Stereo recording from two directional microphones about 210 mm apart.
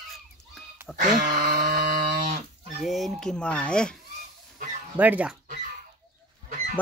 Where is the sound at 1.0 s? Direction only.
40° right (ahead or behind).